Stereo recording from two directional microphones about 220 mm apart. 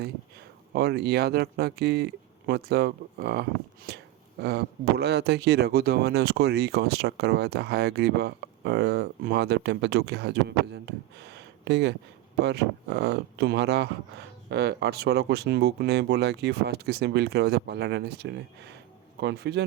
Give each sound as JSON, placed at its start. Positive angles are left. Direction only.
{"t": 0.7, "sound": "speech", "side_deg": -45}